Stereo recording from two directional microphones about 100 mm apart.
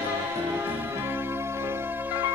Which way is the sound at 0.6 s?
20° right (ahead or behind).